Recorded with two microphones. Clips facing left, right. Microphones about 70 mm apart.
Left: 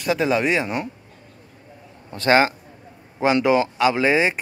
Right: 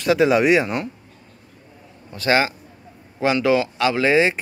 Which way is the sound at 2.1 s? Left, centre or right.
Left.